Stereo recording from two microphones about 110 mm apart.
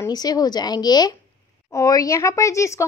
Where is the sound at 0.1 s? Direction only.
35° left (ahead or behind).